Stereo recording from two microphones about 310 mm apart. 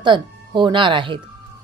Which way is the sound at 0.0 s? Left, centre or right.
Centre.